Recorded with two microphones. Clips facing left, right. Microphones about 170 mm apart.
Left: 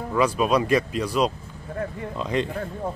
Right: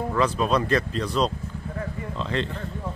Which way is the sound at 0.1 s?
10° left (ahead or behind).